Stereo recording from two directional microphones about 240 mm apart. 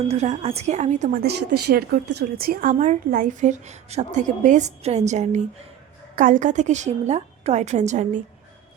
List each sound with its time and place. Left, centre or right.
0.1 s a woman's voice: right